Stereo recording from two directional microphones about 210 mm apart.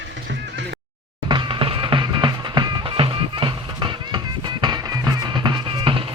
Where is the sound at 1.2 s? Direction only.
20° right (ahead or behind).